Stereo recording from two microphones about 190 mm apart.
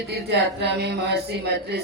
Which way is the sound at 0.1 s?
60° right (ahead or behind).